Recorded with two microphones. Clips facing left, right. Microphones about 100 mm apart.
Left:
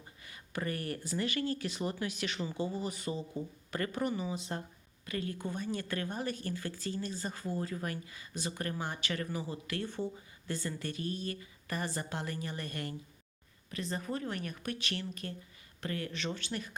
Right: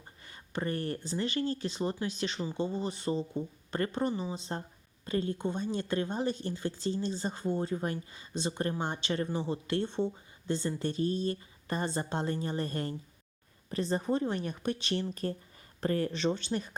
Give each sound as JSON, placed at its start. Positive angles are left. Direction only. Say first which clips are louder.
{"t": 0.3, "sound": "speech", "louder": "right 3 dB", "side_deg": -30}